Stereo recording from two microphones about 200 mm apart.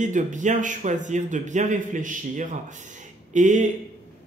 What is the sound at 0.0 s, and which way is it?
Speech, 40° right (ahead or behind).